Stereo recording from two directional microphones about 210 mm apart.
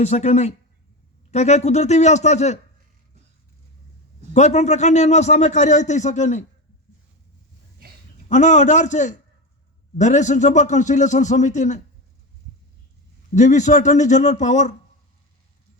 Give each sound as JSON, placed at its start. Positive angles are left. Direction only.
{"t": 0.0, "sound": "a man's voice", "side_deg": 30}
{"t": 4.4, "sound": "a man's voice", "side_deg": 35}
{"t": 8.3, "sound": "a man's voice", "side_deg": 35}
{"t": 13.3, "sound": "a man's voice", "side_deg": 35}